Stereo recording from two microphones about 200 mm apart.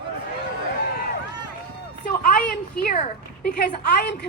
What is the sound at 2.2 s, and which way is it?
Speech, 45° left (ahead or behind).